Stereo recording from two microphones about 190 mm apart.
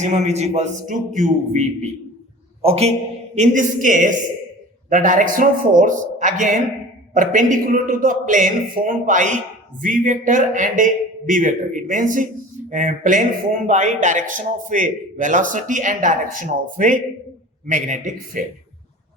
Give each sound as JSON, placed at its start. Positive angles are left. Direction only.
{"t": 0.0, "sound": "a man's voice", "side_deg": -35}